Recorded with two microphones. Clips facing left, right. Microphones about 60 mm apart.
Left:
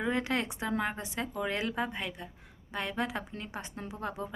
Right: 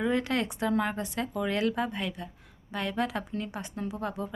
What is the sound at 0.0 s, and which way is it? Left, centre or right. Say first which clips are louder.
A woman's voice: right 3 dB; left.